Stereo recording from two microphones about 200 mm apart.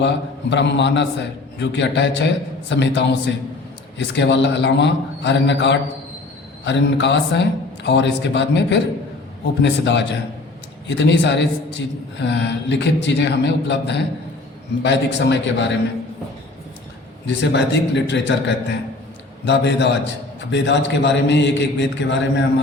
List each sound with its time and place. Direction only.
0.5 s a man's voice: 60° left (ahead or behind)
17.2 s a man's voice: 60° left (ahead or behind)